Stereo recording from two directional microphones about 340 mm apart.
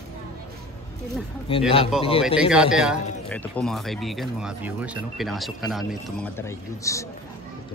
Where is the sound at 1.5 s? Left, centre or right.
Centre.